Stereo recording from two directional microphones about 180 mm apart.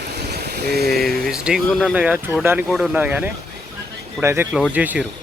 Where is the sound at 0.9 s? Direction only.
Centre (ahead or behind).